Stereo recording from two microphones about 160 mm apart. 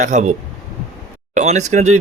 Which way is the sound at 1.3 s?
45° right (ahead or behind).